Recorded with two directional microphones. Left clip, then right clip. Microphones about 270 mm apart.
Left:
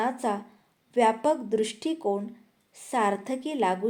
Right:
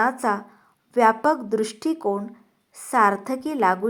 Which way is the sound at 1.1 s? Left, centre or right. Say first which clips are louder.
Right 5 dB; centre.